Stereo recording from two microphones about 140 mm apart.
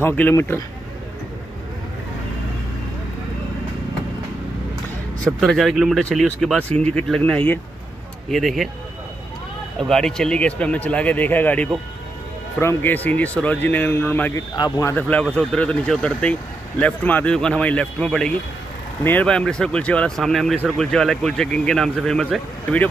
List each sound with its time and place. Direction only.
0.0 s speech: 15° left (ahead or behind)
5.2 s speech: centre (ahead or behind)
9.8 s speech: 5° left (ahead or behind)
14.5 s speech: 25° left (ahead or behind); by 22.8 s 10° left (ahead or behind)